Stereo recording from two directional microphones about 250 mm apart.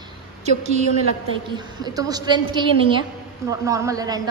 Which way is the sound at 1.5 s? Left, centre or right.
Centre.